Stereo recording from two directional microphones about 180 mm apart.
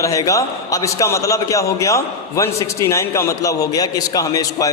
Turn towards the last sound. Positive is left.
turn(degrees=20)  # may be behind; listen again after turning